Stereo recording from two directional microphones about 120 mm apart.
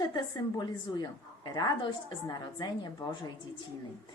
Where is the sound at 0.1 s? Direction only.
35° left (ahead or behind).